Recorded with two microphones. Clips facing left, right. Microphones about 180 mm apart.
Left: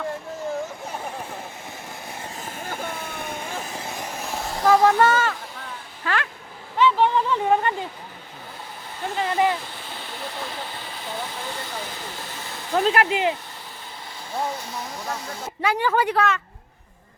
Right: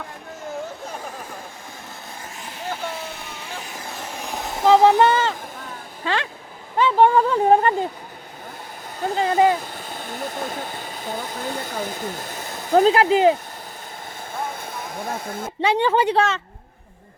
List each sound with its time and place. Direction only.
2.4 s vehicle: 50° left (ahead or behind)
3.8 s a sound: 10° left (ahead or behind)
4.6 s a sound: 25° right (ahead or behind)
6.0 s a woman's voice: 25° right (ahead or behind)
6.7 s a sound: 45° right (ahead or behind)
9.0 s speech: 40° right (ahead or behind)
12.9 s speech: 35° right (ahead or behind)
14.3 s speech: 50° right (ahead or behind)
15.6 s a woman's voice: 25° right (ahead or behind)